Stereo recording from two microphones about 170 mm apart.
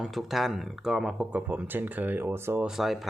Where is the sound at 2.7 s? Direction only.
Centre (ahead or behind).